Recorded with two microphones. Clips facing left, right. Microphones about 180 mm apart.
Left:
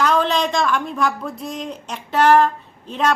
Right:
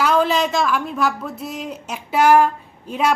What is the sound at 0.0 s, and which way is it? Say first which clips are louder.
A woman's voice: right 1 dB; 5° right (ahead or behind).